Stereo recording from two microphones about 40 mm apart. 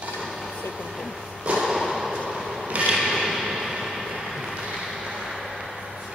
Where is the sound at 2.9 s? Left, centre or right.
Centre.